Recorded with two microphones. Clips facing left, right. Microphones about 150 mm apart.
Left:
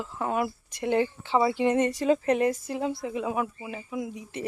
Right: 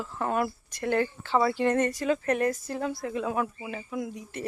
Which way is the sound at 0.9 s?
20° left (ahead or behind).